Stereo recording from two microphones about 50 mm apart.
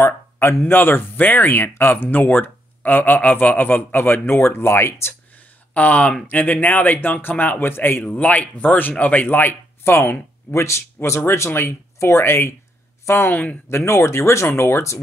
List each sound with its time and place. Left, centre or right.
0.0 s a sound: left
0.7 s speech: left
2.0 s speech: left
5.8 s a man's voice: left
8.0 s a man's voice: left
9.8 s speech: left
13.3 s a man's voice: left
13.7 s speech: left